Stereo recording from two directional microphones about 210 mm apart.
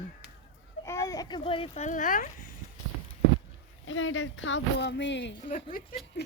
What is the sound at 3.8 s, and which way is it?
Speech, 65° left (ahead or behind).